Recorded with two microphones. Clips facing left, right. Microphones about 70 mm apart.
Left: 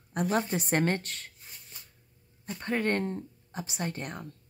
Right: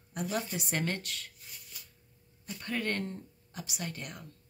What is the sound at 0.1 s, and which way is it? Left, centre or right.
Speech, left.